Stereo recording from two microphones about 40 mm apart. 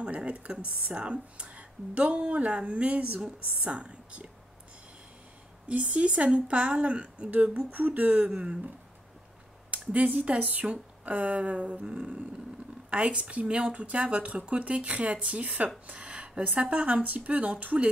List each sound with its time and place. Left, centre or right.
0.1 s speech: right
5.7 s speech: right
7.7 s speech: right
9.7 s speech: right
15.9 s a sound: right
16.7 s speech: right